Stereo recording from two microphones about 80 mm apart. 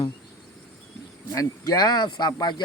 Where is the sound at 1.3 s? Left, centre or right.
Left.